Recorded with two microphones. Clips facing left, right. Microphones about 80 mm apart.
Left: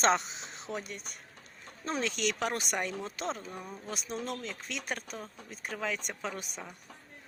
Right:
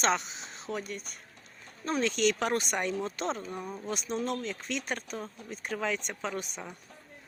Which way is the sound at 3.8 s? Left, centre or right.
Centre.